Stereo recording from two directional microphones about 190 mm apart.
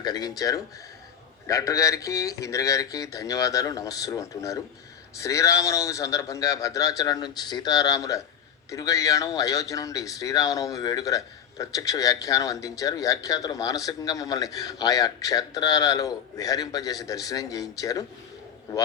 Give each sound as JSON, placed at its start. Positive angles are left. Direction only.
{"t": 0.0, "sound": "speech", "side_deg": 20}